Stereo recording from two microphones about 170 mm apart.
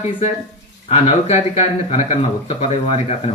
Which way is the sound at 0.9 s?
40° left (ahead or behind).